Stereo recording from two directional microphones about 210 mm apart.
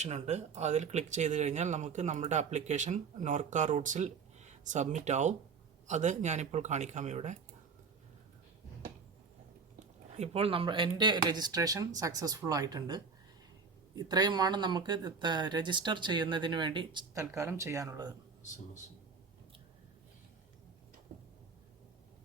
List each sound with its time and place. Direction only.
0.0 s speech: 30° right (ahead or behind)
10.2 s speech: 30° right (ahead or behind)